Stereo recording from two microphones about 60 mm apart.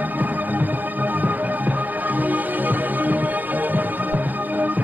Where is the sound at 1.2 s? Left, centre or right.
Right.